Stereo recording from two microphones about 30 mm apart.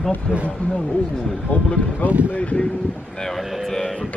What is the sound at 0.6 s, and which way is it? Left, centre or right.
Speech, left.